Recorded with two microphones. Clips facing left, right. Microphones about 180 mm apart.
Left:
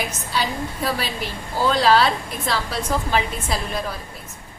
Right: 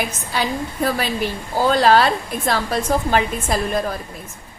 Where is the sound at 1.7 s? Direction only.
50° right (ahead or behind).